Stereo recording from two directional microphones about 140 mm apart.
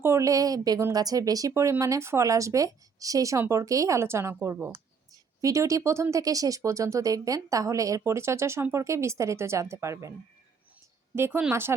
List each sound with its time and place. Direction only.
0.0 s speech: 20° right (ahead or behind)